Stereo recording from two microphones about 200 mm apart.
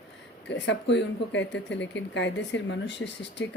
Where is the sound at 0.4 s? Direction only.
65° left (ahead or behind).